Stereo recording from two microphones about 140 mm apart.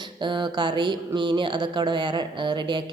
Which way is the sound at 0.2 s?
35° right (ahead or behind).